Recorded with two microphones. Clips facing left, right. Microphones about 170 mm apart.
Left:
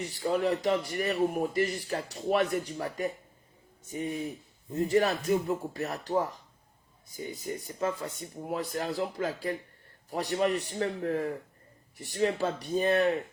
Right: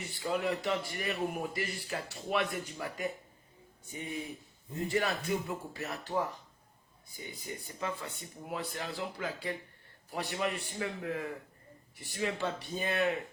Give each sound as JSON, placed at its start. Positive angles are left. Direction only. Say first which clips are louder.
{"t": 0.0, "sound": "speech", "louder": "left 5 dB", "side_deg": 35}
{"t": 7.2, "sound": "speech", "louder": "left 7 dB", "side_deg": 45}